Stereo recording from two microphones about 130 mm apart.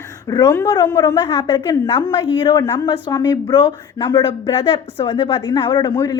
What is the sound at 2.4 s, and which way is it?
A woman's voice, 30° left (ahead or behind).